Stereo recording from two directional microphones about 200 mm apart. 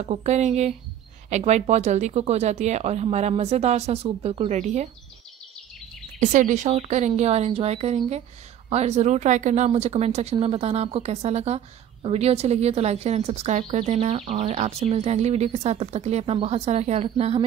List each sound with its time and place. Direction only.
0.0 s speech: 35° right (ahead or behind)
6.1 s speech: 40° right (ahead or behind)